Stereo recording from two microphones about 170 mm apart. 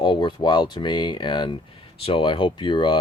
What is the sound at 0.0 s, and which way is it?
Speech, 25° left (ahead or behind).